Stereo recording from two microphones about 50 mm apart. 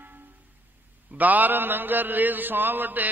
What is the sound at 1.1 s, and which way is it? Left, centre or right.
Mantra, right.